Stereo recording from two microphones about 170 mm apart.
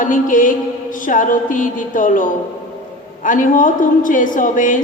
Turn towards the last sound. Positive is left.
turn(degrees=50)  # may be behind; listen again after turning